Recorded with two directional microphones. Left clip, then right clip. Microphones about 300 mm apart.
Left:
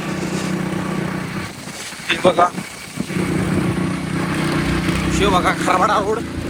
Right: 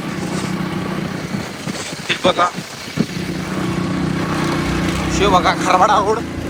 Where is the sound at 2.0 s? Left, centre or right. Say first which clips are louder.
Left 1 dB; centre.